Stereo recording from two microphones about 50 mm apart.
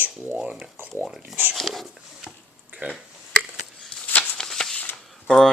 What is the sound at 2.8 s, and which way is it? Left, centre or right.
Speech, right.